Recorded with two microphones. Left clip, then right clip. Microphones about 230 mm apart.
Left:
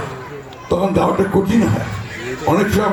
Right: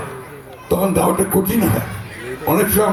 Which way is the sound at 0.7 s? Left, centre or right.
Right.